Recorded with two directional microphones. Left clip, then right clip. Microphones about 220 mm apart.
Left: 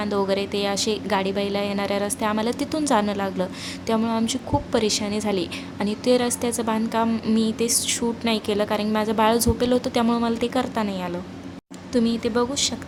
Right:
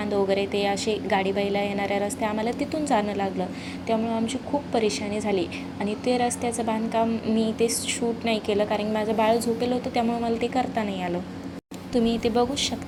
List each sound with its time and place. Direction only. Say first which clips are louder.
0.0 s a woman's voice: left 1 dB; 15° left (ahead or behind)